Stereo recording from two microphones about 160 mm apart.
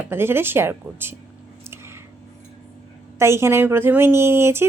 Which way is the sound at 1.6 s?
15° right (ahead or behind).